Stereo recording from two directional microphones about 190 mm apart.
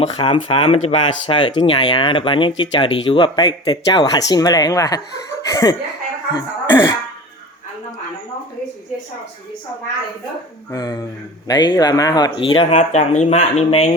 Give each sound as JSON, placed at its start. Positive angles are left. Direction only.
{"t": 0.0, "sound": "speech", "side_deg": 30}
{"t": 5.4, "sound": "chuckle", "side_deg": 20}
{"t": 6.3, "sound": "speech", "side_deg": 25}
{"t": 10.7, "sound": "speech", "side_deg": 20}